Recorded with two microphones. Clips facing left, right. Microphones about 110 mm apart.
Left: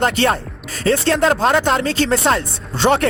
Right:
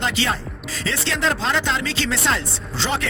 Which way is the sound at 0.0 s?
55° left (ahead or behind).